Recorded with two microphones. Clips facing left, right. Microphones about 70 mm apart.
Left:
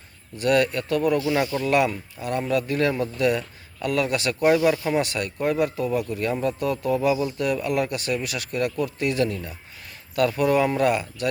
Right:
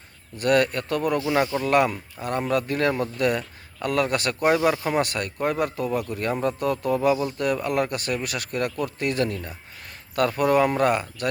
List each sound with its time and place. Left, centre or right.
0.3 s speech: right
1.2 s speech: right
1.6 s speech: right